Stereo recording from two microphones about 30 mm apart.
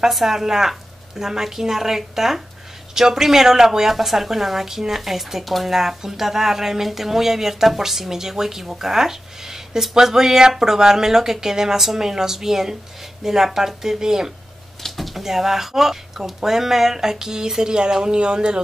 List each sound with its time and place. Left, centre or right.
0.1 s speech: centre
3.8 s speech: centre
15.0 s speech: centre; by 18.6 s right